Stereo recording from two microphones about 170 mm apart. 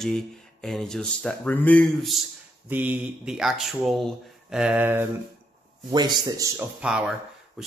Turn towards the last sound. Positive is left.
turn(degrees=-5)  # may be behind; listen again after turning